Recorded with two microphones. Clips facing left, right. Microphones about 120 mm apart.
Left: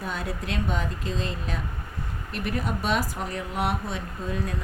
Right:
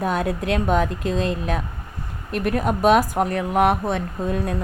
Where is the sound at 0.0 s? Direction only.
60° right (ahead or behind).